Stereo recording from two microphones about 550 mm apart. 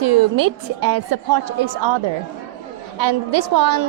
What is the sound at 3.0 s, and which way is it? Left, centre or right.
Speech, right.